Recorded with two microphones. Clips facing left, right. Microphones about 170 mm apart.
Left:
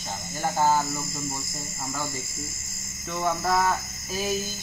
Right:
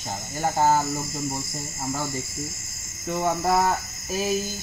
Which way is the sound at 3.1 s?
20° right (ahead or behind).